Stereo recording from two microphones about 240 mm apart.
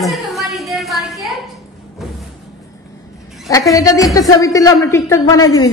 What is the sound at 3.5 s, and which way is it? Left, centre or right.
Speech, centre.